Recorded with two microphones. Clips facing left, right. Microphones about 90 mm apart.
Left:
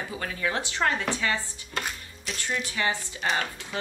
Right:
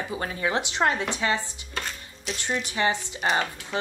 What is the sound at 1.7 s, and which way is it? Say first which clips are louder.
Chopping: left 2 dB; 5° left (ahead or behind).